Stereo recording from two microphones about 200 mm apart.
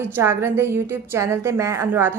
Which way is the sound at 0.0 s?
10° right (ahead or behind).